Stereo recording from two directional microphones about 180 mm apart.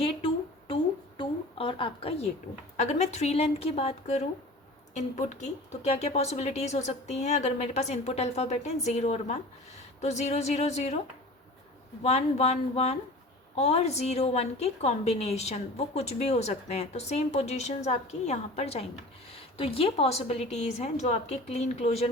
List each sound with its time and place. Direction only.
0.7 s a sound: 30° left (ahead or behind)
2.7 s a woman's voice: 40° left (ahead or behind)
12.0 s a woman's voice: 35° left (ahead or behind)